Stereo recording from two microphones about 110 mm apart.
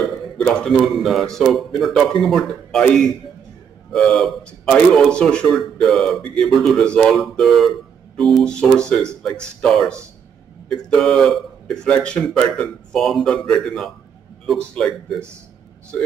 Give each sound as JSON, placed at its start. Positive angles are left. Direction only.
{"t": 0.4, "sound": "a man's voice", "side_deg": 5}